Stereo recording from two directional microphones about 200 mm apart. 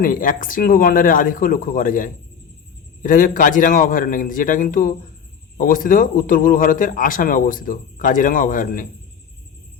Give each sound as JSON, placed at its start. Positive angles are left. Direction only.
{"t": 0.0, "sound": "speech", "side_deg": 45}